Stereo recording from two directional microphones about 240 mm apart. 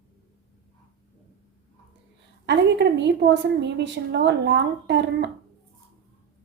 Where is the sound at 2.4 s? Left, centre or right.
Right.